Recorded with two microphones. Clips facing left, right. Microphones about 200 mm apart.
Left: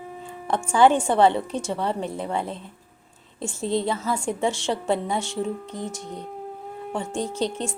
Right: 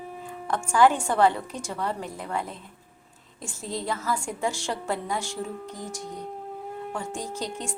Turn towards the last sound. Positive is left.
turn(degrees=25)  # may be behind; listen again after turning